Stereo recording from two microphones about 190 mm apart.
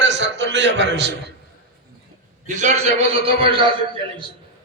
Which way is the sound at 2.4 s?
40° right (ahead or behind).